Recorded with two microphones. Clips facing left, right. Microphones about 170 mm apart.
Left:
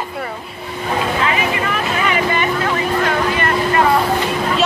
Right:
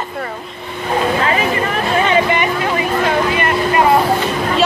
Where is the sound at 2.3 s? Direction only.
15° right (ahead or behind).